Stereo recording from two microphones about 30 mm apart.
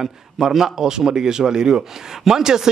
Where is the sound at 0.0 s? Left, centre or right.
Centre.